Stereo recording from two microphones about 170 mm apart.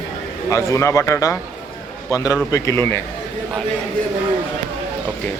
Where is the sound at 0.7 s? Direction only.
15° left (ahead or behind).